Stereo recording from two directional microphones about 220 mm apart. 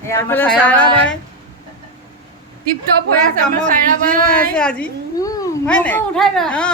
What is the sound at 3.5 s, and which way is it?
Speech, 40° right (ahead or behind).